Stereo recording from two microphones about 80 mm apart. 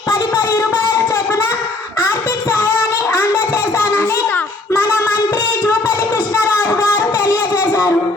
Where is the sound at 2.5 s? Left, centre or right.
Left.